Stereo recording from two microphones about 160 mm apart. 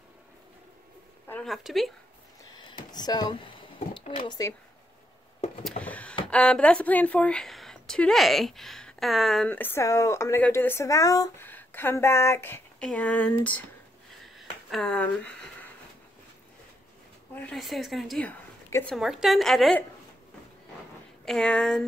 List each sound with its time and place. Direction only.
1.4 s a woman's voice: centre (ahead or behind)
2.9 s speech: 25° left (ahead or behind)
3.9 s speech: 35° left (ahead or behind)
5.6 s a sound: 5° left (ahead or behind)
6.3 s a woman's voice: 5° left (ahead or behind)
14.2 s a sound: centre (ahead or behind)
17.4 s a woman's voice: 5° left (ahead or behind)
18.9 s a woman's voice: centre (ahead or behind)
21.3 s a woman's voice: 5° left (ahead or behind)